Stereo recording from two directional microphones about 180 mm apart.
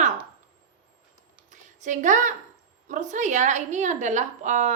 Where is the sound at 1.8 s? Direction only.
45° right (ahead or behind).